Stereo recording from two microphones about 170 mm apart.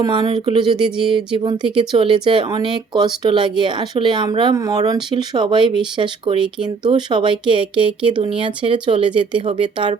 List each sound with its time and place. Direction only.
0.0 s speech: 25° right (ahead or behind)